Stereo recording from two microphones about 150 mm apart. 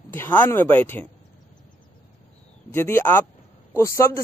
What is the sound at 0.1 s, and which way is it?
Speech, 15° left (ahead or behind).